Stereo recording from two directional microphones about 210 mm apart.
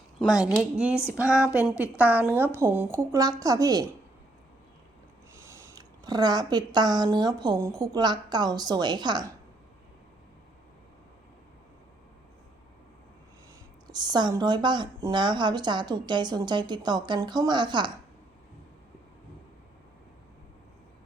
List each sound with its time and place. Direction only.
0.2 s a woman's voice: 5° right (ahead or behind)
5.7 s a woman's voice: 20° right (ahead or behind)
13.8 s a woman's voice: 20° right (ahead or behind)